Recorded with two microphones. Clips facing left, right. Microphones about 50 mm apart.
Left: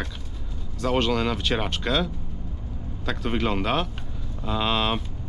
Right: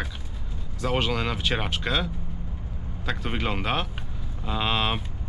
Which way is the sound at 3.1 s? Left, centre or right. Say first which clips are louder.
Left 3 dB; centre.